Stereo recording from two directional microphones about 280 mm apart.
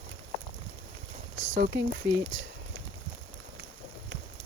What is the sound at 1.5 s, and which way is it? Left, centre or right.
Speech, right.